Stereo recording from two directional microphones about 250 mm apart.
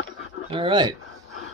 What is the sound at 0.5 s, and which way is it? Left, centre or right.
Speech, centre.